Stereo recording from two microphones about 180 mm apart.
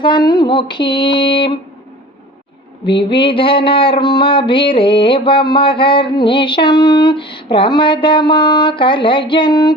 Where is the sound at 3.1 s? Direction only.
30° left (ahead or behind).